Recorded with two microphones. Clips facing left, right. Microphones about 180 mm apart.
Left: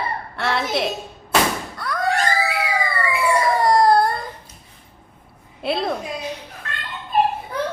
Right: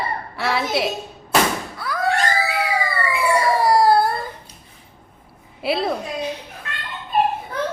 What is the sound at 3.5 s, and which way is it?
Baby cry, 5° right (ahead or behind).